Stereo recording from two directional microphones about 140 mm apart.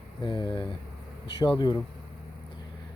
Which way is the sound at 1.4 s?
30° left (ahead or behind).